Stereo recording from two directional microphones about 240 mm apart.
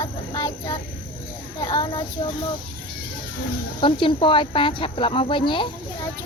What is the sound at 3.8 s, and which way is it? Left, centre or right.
Speech, left.